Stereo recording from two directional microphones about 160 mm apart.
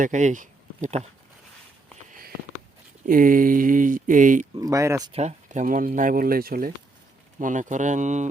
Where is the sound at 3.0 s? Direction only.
60° right (ahead or behind).